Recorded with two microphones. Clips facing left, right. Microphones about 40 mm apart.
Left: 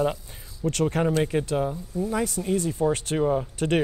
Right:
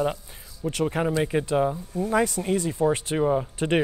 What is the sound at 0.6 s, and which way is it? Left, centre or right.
Speech, centre.